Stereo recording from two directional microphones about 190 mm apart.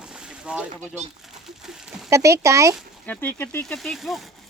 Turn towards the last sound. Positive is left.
turn(degrees=0)  # may be behind; listen again after turning